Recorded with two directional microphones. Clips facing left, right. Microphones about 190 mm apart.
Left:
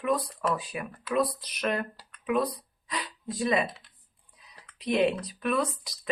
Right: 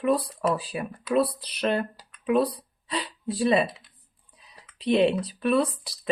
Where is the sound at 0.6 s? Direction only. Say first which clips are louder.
Right 4 dB; 30° right (ahead or behind).